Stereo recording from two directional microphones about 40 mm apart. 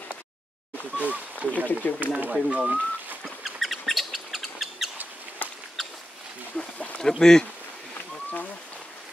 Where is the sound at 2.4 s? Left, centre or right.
Right.